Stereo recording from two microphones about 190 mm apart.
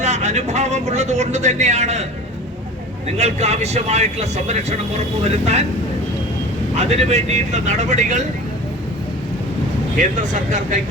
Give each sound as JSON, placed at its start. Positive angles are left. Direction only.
{"t": 0.0, "sound": "speech", "side_deg": -35}
{"t": 3.2, "sound": "speech", "side_deg": -35}
{"t": 6.7, "sound": "speech", "side_deg": -35}
{"t": 10.0, "sound": "speech", "side_deg": -40}